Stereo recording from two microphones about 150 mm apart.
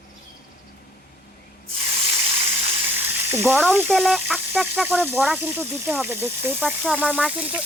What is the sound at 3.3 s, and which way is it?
Speech, 10° right (ahead or behind).